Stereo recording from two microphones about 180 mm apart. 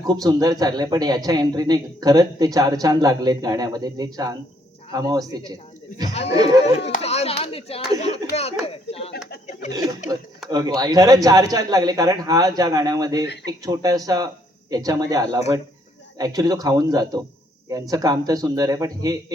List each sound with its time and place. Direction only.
0.0 s a man's voice: 20° right (ahead or behind)
6.8 s a sound: 35° left (ahead or behind)
10.5 s a man's voice: 20° right (ahead or behind)